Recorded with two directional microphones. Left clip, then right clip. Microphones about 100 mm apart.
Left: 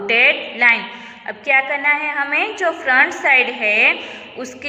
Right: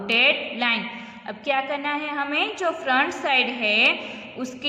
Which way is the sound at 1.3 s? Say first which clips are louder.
Left 8 dB; 40° right (ahead or behind).